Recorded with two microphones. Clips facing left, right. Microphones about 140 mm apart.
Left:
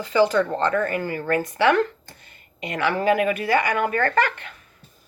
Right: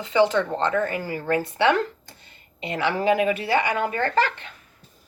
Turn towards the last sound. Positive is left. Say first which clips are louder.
# left 1 dB
turn(degrees=55)  # may be behind; listen again after turning